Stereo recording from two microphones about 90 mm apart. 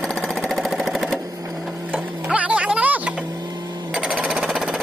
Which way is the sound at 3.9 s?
10° right (ahead or behind).